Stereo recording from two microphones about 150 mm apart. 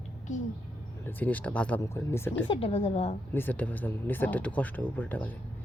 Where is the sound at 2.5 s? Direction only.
40° left (ahead or behind).